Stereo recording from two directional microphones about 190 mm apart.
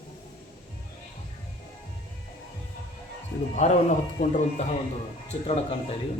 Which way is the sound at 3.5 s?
40° left (ahead or behind).